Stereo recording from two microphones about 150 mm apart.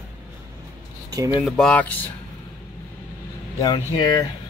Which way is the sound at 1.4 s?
5° left (ahead or behind).